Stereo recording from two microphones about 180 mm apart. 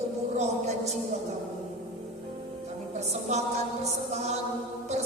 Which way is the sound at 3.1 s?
40° right (ahead or behind).